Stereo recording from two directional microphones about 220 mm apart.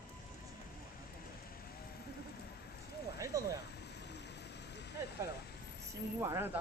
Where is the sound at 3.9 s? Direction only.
50° left (ahead or behind).